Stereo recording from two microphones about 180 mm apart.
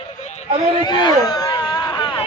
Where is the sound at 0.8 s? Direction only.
25° left (ahead or behind).